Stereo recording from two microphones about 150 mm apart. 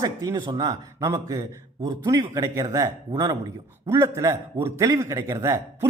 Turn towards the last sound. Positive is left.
turn(degrees=-25)  # may be behind; listen again after turning